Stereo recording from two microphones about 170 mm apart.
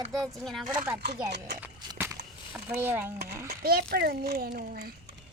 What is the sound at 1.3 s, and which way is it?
Speech, 80° right.